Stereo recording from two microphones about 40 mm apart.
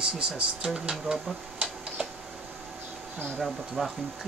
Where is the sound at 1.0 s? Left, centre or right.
Centre.